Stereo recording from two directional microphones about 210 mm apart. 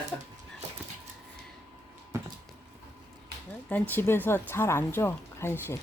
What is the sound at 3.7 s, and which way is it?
Speech, 10° left (ahead or behind).